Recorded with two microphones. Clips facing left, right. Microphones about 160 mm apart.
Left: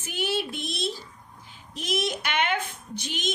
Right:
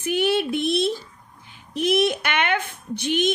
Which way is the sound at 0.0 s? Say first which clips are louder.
Right 8 dB; 60° right (ahead or behind).